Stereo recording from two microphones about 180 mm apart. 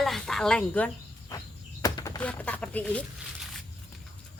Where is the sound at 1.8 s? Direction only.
20° left (ahead or behind).